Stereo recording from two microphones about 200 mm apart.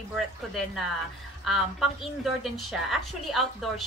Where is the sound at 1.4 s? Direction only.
Centre (ahead or behind).